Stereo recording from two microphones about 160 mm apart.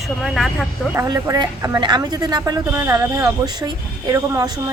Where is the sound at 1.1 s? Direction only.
25° right (ahead or behind).